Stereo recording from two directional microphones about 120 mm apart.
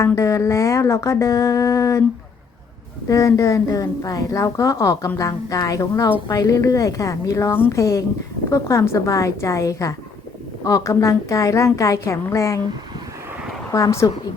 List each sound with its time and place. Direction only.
0.0 s a woman's voice: 25° left (ahead or behind)
3.1 s a woman's voice: 25° left (ahead or behind)
13.7 s a woman's voice: 25° left (ahead or behind)